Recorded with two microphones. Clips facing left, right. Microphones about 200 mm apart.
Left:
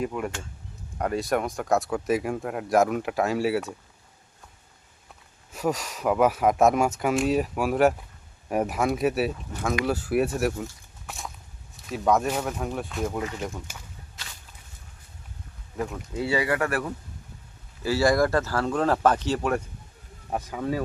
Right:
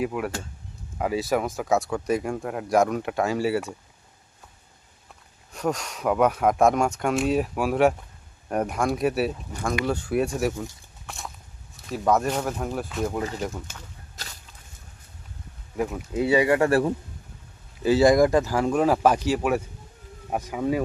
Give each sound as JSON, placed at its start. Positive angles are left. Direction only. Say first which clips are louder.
{"t": 0.0, "sound": "speech", "louder": "right 2 dB", "side_deg": -5}
{"t": 5.5, "sound": "speech", "louder": "even", "side_deg": 5}
{"t": 14.2, "sound": "walk", "louder": "right 3 dB", "side_deg": -40}
{"t": 15.8, "sound": "speech", "louder": "right 4 dB", "side_deg": -5}
{"t": 16.1, "sound": "speech", "louder": "right 5 dB", "side_deg": -20}